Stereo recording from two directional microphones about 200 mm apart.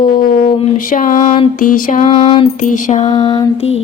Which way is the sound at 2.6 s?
40° left (ahead or behind).